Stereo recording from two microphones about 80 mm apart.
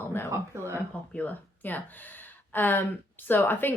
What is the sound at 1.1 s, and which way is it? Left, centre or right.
Speech, left.